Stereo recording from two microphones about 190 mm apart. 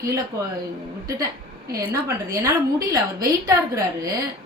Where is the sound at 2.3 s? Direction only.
15° right (ahead or behind).